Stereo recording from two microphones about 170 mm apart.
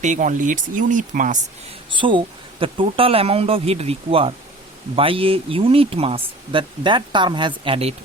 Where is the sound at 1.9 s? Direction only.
30° right (ahead or behind).